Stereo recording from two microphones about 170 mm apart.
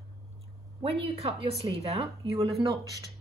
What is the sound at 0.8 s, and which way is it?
Speech, 35° right (ahead or behind).